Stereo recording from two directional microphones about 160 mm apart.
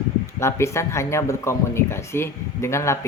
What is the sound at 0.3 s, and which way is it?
Speech, 15° left (ahead or behind).